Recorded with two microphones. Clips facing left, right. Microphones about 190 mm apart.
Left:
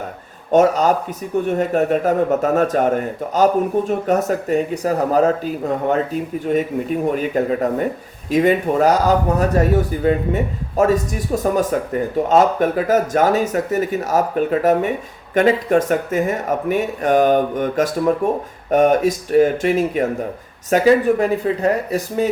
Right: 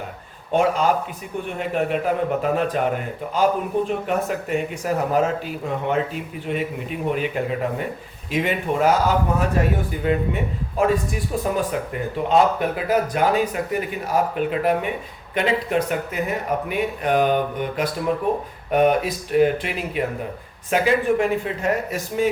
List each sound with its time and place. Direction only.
0.5 s a man's voice: 40° left (ahead or behind)
11.5 s a man's voice: 45° left (ahead or behind)